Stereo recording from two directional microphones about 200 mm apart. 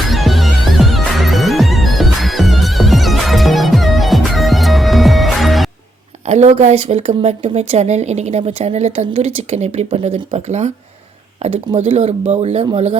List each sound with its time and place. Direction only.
0.1 s music: centre (ahead or behind)
6.2 s speech: 35° right (ahead or behind)